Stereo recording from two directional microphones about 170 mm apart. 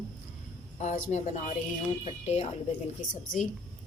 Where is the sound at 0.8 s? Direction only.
45° left (ahead or behind).